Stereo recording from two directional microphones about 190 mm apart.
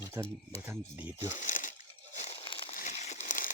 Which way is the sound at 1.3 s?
40° left (ahead or behind).